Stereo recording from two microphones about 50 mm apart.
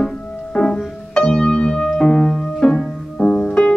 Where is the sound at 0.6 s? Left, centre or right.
Centre.